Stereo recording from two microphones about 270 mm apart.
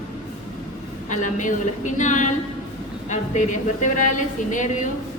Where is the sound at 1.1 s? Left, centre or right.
Left.